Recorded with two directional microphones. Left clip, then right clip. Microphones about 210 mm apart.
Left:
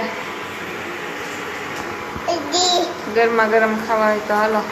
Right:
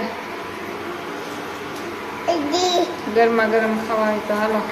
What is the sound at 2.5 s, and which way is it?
Child singing, 40° right (ahead or behind).